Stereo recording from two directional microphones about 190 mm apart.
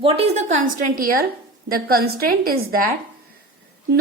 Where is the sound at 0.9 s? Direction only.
50° right (ahead or behind).